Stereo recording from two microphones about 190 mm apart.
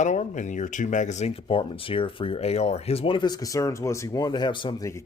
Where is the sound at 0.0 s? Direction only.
40° left (ahead or behind).